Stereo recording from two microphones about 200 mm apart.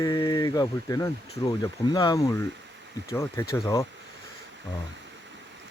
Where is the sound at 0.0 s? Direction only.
20° left (ahead or behind).